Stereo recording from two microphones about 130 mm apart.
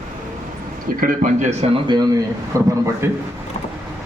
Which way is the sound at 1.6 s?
45° right (ahead or behind).